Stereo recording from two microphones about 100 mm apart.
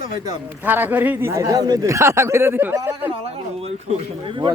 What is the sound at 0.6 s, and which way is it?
A man's voice, 20° right (ahead or behind).